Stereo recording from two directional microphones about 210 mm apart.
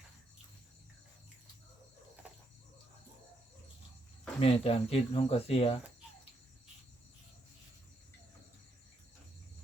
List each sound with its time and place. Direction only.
4.4 s speech: 30° left (ahead or behind)